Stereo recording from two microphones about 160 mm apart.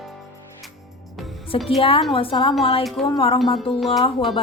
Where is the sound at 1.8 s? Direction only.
35° left (ahead or behind).